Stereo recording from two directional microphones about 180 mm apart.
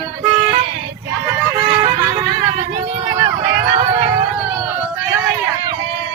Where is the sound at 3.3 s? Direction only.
60° right (ahead or behind).